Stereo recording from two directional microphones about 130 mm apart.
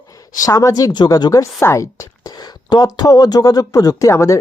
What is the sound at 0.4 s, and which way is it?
Speech, 30° left (ahead or behind).